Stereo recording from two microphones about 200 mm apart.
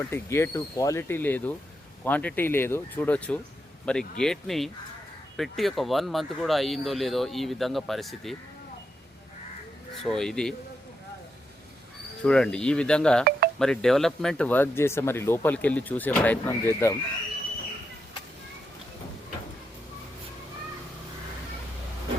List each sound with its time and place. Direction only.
0.1 s speech: 10° left (ahead or behind)
9.9 s speech: centre (ahead or behind)
12.2 s speech: 5° left (ahead or behind)